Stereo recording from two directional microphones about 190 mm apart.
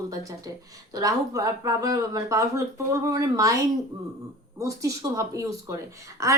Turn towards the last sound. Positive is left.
turn(degrees=-15)  # may be behind; listen again after turning